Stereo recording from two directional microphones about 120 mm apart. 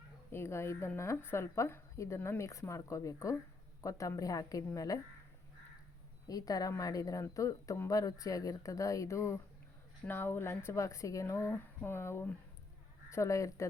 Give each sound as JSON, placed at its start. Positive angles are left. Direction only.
{"t": 0.3, "sound": "speech", "side_deg": 20}
{"t": 6.2, "sound": "speech", "side_deg": 30}